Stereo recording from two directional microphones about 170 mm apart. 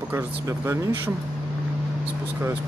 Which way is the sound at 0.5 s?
15° right (ahead or behind).